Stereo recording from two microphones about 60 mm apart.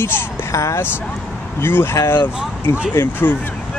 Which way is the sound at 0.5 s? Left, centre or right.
Left.